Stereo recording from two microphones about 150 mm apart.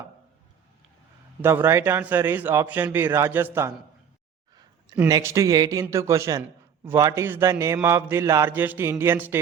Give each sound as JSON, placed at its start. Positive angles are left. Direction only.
{"t": 1.4, "sound": "a man's voice", "side_deg": -15}
{"t": 5.0, "sound": "a man's voice", "side_deg": -20}